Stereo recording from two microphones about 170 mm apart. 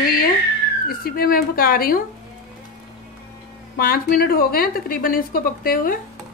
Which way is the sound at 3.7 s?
60° left (ahead or behind).